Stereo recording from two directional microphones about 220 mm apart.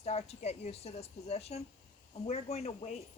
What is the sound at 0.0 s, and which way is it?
Speech, 30° left (ahead or behind).